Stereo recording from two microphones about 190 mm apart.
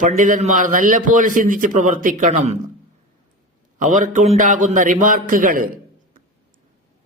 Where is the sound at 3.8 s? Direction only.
40° right (ahead or behind).